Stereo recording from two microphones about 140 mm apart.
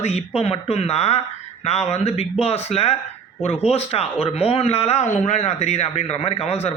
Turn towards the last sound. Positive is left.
turn(degrees=50)  # may be behind; listen again after turning